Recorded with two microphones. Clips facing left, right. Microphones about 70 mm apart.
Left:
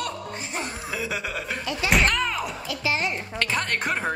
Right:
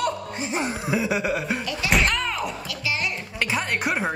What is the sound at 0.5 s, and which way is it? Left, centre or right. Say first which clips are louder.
Music: right 7 dB; centre.